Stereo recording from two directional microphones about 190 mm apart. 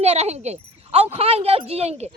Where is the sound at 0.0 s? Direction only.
35° right (ahead or behind).